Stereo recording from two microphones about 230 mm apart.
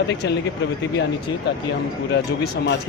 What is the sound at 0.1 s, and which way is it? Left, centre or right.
Speech, left.